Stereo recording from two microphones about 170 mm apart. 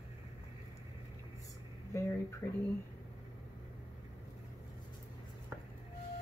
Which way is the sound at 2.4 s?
15° left (ahead or behind).